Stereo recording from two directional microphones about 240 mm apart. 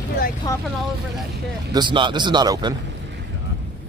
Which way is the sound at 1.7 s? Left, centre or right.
Centre.